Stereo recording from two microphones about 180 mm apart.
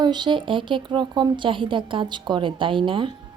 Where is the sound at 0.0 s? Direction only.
25° right (ahead or behind).